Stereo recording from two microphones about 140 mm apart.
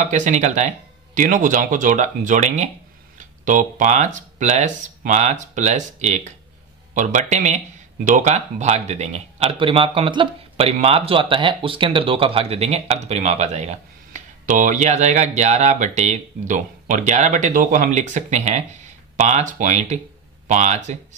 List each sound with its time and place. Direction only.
0.0 s speech: 65° right (ahead or behind)